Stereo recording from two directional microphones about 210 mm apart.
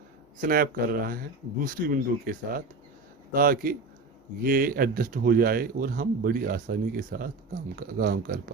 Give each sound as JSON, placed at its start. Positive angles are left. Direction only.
{"t": 0.3, "sound": "speech", "side_deg": -40}